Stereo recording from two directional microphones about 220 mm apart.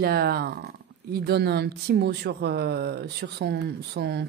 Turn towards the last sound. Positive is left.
turn(degrees=-45)  # may be behind; listen again after turning